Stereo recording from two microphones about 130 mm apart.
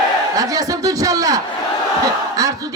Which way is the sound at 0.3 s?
25° right (ahead or behind).